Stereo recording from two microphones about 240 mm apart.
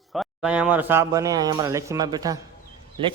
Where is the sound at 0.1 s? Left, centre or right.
Centre.